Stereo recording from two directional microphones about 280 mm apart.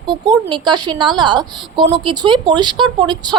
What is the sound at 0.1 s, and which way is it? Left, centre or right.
A woman's voice, centre.